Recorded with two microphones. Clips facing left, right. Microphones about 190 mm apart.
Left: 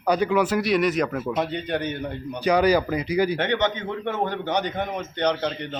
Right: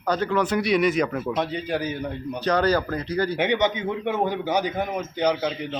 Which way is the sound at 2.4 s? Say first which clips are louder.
Left 2 dB; 10° left (ahead or behind).